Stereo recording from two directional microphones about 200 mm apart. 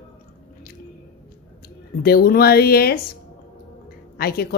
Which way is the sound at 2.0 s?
50° left (ahead or behind).